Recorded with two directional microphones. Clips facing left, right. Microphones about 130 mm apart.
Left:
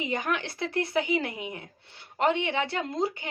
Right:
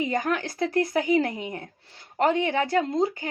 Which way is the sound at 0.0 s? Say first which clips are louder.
Right 4 dB; 45° right (ahead or behind).